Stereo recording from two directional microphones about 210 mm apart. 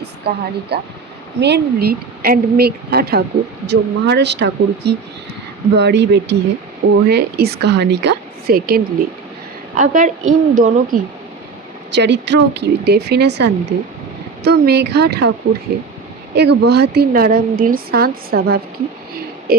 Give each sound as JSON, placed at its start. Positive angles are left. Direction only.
{"t": 0.0, "sound": "a woman's voice", "side_deg": -50}
{"t": 11.9, "sound": "a woman's voice", "side_deg": -55}
{"t": 16.3, "sound": "a woman's voice", "side_deg": -50}